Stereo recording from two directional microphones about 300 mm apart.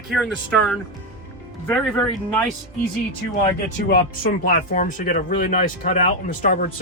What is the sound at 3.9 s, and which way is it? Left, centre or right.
Speech, left.